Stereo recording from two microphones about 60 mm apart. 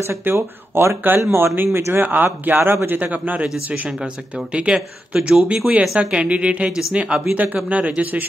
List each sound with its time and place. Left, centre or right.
0.0 s speech: right
3.0 s a man's voice: right
4.5 s speech: centre
6.1 s a man's voice: right